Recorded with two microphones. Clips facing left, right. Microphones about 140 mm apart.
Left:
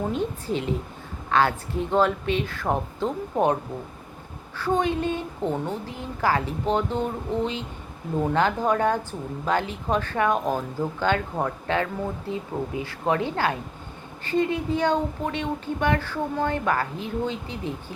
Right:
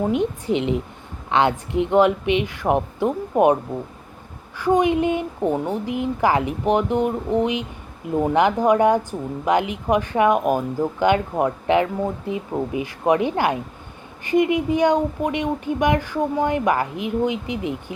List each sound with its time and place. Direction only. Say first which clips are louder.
0.1 s speech: right 6 dB; 15° right (ahead or behind)